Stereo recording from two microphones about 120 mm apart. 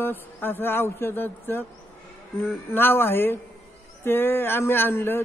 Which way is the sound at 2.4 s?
20° left (ahead or behind).